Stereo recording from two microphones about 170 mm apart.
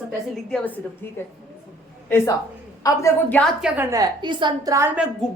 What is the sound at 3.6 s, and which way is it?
Speech, 5° right (ahead or behind).